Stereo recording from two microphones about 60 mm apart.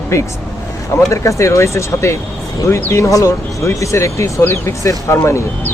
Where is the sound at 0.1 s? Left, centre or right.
Left.